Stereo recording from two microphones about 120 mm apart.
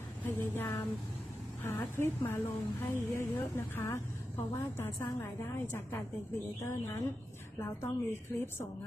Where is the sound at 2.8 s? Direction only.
20° left (ahead or behind).